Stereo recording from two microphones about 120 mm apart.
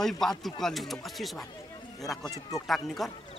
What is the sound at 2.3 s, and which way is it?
Speech, 30° left (ahead or behind).